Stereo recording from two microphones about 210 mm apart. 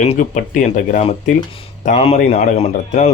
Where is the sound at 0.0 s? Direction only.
35° left (ahead or behind).